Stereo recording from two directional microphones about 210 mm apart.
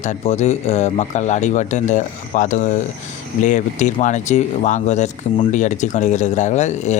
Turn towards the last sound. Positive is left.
turn(degrees=35)  # may be behind; listen again after turning